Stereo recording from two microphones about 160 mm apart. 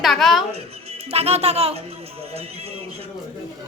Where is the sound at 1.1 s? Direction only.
40° right (ahead or behind).